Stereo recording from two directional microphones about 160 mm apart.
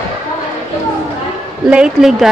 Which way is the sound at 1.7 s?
5° right (ahead or behind).